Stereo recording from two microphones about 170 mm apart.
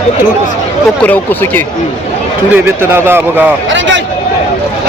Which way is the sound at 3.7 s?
90° right.